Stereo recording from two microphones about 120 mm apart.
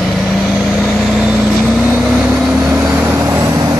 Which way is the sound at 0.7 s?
Centre (ahead or behind).